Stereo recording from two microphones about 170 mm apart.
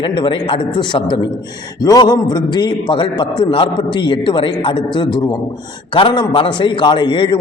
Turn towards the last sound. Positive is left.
turn(degrees=30)  # may be behind; listen again after turning